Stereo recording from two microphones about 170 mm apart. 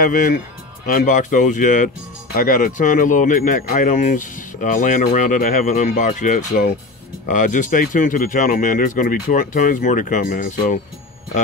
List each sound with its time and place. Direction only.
0.9 s speech: 45° left (ahead or behind)